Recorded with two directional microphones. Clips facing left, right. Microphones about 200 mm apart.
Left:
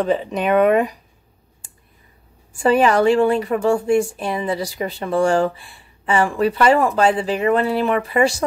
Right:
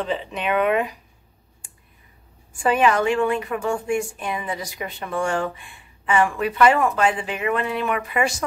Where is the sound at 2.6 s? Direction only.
35° left (ahead or behind).